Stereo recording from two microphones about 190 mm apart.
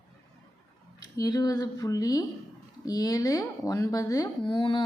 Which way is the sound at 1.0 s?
20° left (ahead or behind).